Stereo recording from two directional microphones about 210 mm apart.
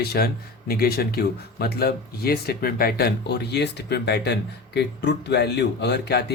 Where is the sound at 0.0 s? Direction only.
50° left (ahead or behind).